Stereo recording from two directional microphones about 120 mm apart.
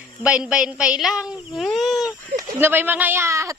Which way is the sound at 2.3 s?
15° right (ahead or behind).